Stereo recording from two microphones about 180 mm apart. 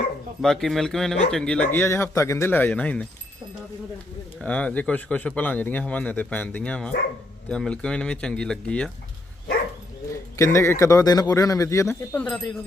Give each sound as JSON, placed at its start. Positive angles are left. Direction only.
{"t": 0.4, "sound": "speech", "side_deg": 0}
{"t": 4.4, "sound": "speech", "side_deg": 5}
{"t": 10.1, "sound": "speech", "side_deg": 15}